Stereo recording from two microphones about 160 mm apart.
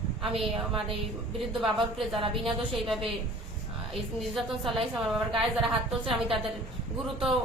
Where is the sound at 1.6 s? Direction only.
Centre (ahead or behind).